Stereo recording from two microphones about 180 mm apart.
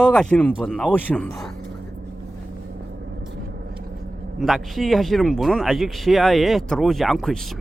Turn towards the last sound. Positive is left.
turn(degrees=0)  # may be behind; listen again after turning